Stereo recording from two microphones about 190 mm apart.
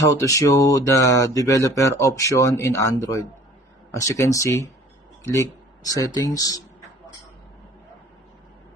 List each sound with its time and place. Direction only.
0.0 s speech: 15° left (ahead or behind)